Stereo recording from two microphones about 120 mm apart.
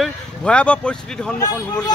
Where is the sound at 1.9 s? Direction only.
35° left (ahead or behind).